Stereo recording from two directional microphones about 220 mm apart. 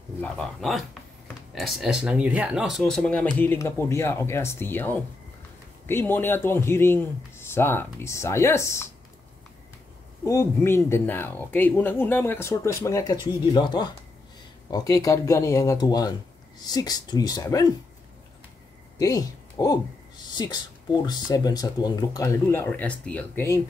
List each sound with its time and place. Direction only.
0.2 s speech: centre (ahead or behind)
10.2 s speech: 10° left (ahead or behind)
18.9 s a woman's voice: 15° left (ahead or behind)